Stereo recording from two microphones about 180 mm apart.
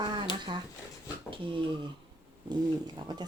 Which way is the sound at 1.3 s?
30° right (ahead or behind).